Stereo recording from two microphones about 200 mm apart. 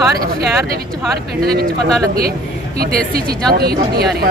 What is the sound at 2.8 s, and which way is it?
Speech, 50° right (ahead or behind).